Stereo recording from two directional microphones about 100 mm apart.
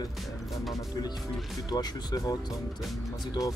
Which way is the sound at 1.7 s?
40° left (ahead or behind).